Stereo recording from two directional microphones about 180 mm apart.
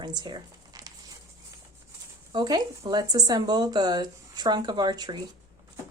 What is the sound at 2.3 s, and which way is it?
Speech, 20° right (ahead or behind).